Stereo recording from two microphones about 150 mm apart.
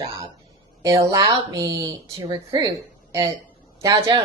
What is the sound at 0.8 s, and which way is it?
A woman's voice, 25° right (ahead or behind).